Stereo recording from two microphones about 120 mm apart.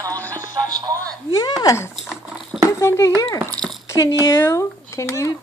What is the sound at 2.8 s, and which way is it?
A child's voice, 20° left (ahead or behind).